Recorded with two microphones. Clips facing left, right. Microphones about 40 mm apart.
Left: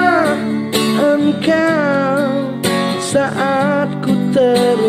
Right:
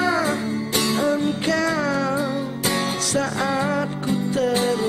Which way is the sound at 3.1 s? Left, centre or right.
Left.